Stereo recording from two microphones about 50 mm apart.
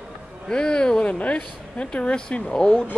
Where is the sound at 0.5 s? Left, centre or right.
Centre.